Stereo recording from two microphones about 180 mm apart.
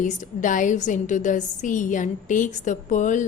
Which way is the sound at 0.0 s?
45° left (ahead or behind).